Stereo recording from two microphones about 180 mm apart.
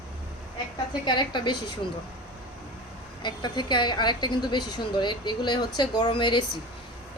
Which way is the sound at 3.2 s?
25° left (ahead or behind).